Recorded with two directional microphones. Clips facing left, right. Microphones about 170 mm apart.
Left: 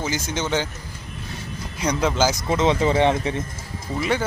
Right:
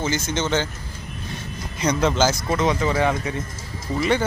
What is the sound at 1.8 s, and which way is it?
Speech, 10° left (ahead or behind).